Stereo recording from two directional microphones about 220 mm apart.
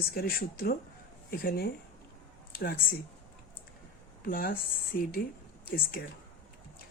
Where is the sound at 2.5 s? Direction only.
45° left (ahead or behind).